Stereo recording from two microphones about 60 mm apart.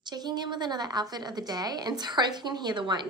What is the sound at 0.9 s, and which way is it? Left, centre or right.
Speech, right.